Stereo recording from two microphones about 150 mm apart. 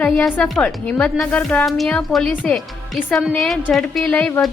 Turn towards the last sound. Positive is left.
turn(degrees=10)  # may be behind; listen again after turning